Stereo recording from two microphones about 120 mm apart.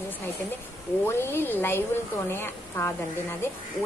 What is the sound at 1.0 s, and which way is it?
A woman's voice, 20° left (ahead or behind).